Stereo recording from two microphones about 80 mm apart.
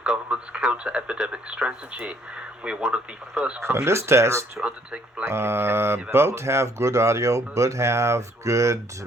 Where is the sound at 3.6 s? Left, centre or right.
Right.